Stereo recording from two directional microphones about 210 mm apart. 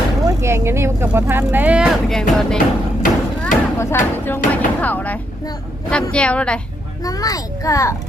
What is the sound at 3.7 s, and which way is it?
A woman's voice, 10° left (ahead or behind).